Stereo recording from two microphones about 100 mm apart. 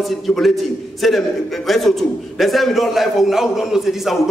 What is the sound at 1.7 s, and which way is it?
A man's voice, centre (ahead or behind).